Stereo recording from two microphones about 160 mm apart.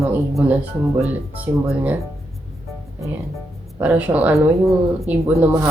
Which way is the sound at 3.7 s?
10° right (ahead or behind).